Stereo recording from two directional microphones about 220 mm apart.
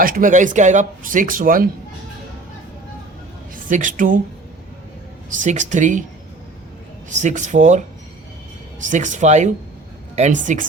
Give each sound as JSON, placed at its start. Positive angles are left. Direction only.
{"t": 0.0, "sound": "speech", "side_deg": -40}
{"t": 3.5, "sound": "a man's voice", "side_deg": -35}
{"t": 5.3, "sound": "speech", "side_deg": -35}
{"t": 7.1, "sound": "speech", "side_deg": -35}
{"t": 8.8, "sound": "speech", "side_deg": -35}